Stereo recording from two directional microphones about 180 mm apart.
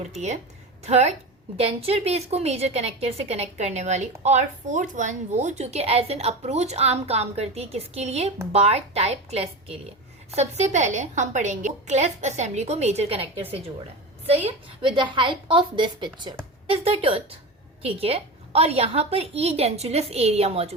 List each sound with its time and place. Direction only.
0.9 s a woman's voice: 40° right (ahead or behind)
14.3 s a woman's voice: 30° right (ahead or behind)